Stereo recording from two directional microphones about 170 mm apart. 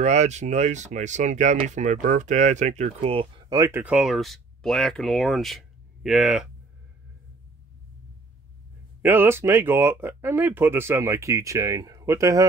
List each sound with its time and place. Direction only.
0.0 s speech: 40° right (ahead or behind); by 3.8 s 20° right (ahead or behind)
3.8 s speech: 5° right (ahead or behind)
9.0 s speech: 10° right (ahead or behind)